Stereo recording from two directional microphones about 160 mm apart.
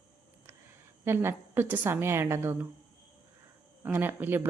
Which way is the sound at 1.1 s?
15° right (ahead or behind).